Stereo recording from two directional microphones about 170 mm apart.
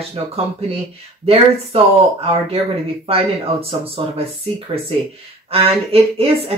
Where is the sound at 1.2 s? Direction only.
35° right (ahead or behind).